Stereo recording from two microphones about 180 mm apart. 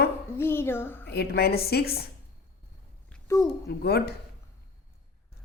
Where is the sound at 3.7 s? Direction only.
60° left (ahead or behind).